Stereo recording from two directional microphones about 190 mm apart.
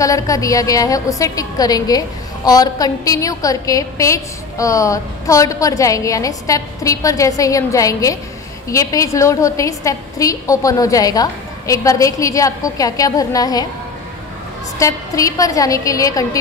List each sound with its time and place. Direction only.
0.0 s a woman's voice: 15° left (ahead or behind)
14.8 s a woman's voice: 15° left (ahead or behind)